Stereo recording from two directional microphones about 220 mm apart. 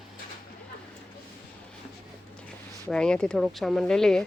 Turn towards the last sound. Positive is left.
turn(degrees=5)  # may be behind; listen again after turning